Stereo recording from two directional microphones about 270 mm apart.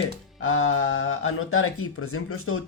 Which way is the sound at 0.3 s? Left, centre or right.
Left.